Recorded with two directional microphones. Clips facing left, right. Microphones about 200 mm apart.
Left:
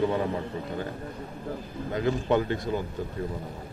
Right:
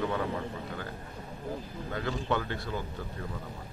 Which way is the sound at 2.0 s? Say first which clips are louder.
Left 7 dB; 20° left (ahead or behind).